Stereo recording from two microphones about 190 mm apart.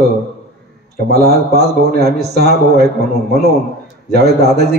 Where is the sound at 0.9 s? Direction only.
55° right (ahead or behind).